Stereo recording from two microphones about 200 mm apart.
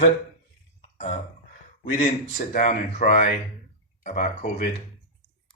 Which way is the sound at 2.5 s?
40° left (ahead or behind).